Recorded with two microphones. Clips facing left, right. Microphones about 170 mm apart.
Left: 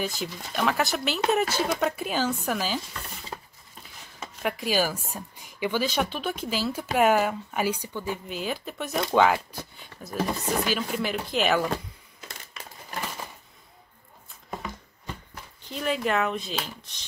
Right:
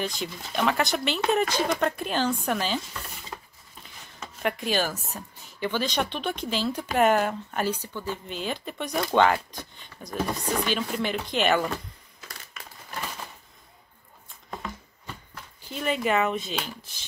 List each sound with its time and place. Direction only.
0.0 s speech: 5° left (ahead or behind)
3.8 s speech: centre (ahead or behind)
15.7 s speech: centre (ahead or behind)